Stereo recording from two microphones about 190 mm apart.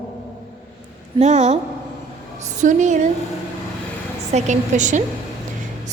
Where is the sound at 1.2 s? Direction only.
35° right (ahead or behind).